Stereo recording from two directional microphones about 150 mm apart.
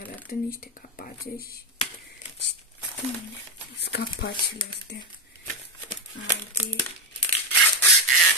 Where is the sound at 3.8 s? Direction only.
90° left.